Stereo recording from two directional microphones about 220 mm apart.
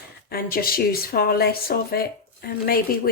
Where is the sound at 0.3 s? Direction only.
45° left (ahead or behind).